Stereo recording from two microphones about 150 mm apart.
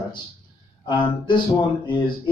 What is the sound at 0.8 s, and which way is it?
Speech, 30° left (ahead or behind).